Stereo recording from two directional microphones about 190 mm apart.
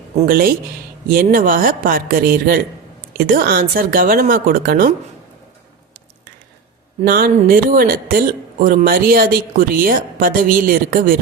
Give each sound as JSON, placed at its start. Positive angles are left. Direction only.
{"t": 0.2, "sound": "speech", "side_deg": -50}
{"t": 7.0, "sound": "speech", "side_deg": -50}